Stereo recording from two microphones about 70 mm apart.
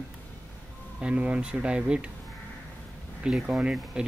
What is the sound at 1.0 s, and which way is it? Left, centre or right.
Speech, centre.